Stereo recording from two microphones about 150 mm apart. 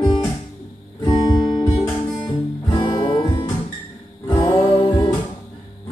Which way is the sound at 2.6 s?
30° left (ahead or behind).